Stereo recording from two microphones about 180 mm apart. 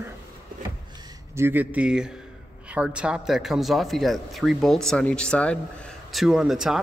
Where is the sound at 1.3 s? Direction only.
15° right (ahead or behind).